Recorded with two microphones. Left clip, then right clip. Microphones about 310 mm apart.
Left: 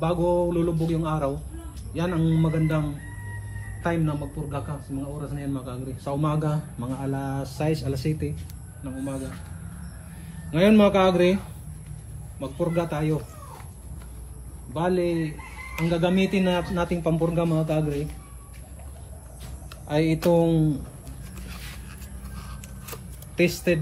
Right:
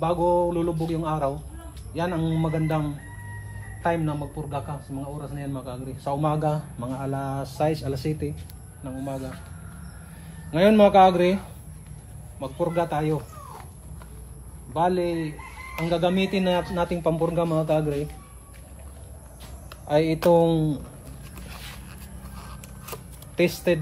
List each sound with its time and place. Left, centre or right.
0.0 s speech: right
3.8 s speech: right
10.5 s speech: right
12.4 s speech: right
14.7 s speech: right
19.9 s speech: right
22.8 s a sound: right